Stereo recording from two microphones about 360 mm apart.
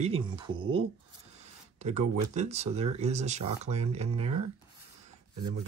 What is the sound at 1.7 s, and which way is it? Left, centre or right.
Speech, centre.